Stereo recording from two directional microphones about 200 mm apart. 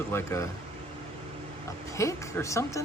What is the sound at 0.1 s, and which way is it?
Speech, 15° left (ahead or behind).